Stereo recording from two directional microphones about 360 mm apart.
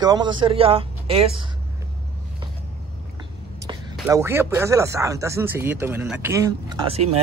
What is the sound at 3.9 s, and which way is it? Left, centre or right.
Speech, centre.